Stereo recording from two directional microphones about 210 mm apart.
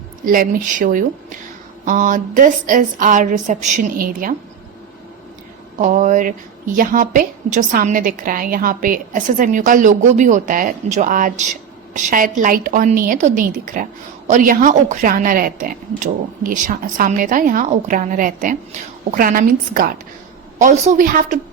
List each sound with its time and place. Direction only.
0.3 s a woman's voice: 40° right (ahead or behind)
5.7 s a woman's voice: 40° right (ahead or behind)